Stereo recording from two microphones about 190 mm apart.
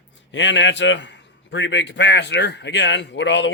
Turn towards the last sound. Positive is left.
turn(degrees=75)  # may be behind; listen again after turning